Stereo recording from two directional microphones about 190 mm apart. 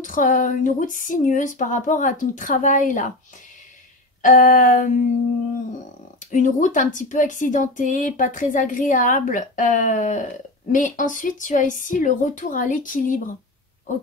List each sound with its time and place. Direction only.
0.0 s speech: 45° left (ahead or behind)
4.2 s speech: 40° left (ahead or behind)
6.1 s speech: 40° left (ahead or behind)